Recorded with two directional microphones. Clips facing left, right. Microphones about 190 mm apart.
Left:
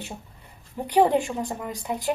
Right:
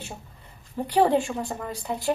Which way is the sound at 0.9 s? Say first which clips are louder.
Left 1 dB; 15° left (ahead or behind).